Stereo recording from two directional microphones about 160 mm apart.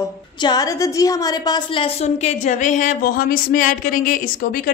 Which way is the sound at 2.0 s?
45° left (ahead or behind).